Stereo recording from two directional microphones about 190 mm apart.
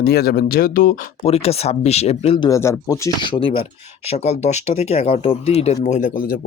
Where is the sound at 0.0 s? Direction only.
55° left (ahead or behind).